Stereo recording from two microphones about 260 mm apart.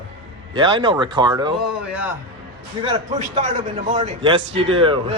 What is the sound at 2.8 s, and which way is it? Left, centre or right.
A man's voice, right.